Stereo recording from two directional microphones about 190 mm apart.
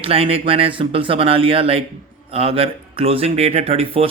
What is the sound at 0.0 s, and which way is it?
Speech, 30° right (ahead or behind).